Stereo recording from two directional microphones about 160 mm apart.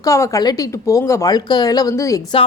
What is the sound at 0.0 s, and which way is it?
Speech, 20° left (ahead or behind).